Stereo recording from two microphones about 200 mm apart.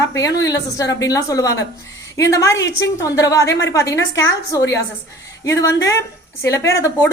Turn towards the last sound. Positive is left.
turn(degrees=15)  # may be behind; listen again after turning